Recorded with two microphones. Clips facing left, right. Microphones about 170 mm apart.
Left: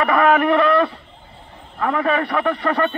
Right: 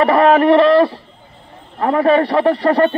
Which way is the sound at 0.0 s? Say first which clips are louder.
Right 5 dB; 30° right (ahead or behind).